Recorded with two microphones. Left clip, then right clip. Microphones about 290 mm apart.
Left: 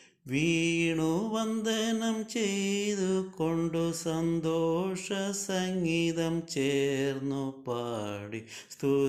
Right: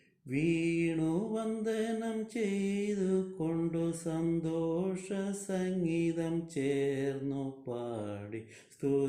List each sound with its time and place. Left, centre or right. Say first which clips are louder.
0.3 s mantra: left 3 dB; left
0.9 s mantra: left 4 dB; centre